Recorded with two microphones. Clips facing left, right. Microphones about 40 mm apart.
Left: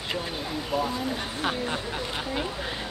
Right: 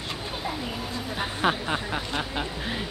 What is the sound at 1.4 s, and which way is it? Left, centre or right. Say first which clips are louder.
Speech: right 4 dB; centre.